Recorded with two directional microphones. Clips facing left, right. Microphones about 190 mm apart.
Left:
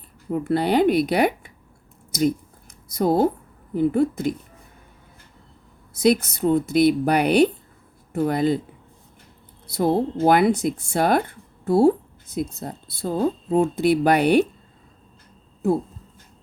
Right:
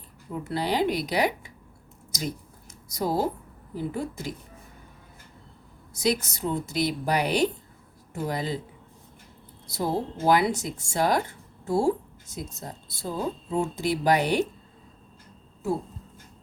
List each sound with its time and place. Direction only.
0.3 s speech: 55° left (ahead or behind)
2.9 s speech: 55° left (ahead or behind)
5.9 s speech: 55° left (ahead or behind)
9.6 s speech: 55° left (ahead or behind)